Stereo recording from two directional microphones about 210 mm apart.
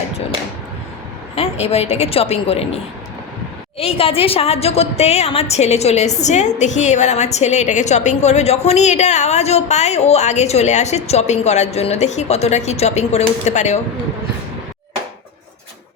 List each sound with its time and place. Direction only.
1.4 s a woman's voice: 30° left (ahead or behind)